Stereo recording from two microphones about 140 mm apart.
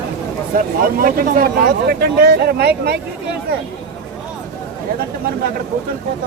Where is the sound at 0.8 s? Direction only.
90° right.